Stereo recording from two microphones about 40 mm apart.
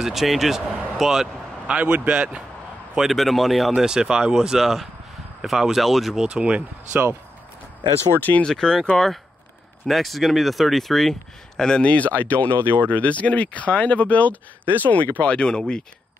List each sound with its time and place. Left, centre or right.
0.0 s speech: centre
1.7 s a man's voice: right
3.0 s speech: centre
3.7 s speech: centre
6.1 s a man's voice: right
6.9 s speech: right
8.5 s speech: centre
11.8 s speech: left
12.5 s speech: right
12.8 s speech: left
14.6 s speech: right
15.2 s speech: left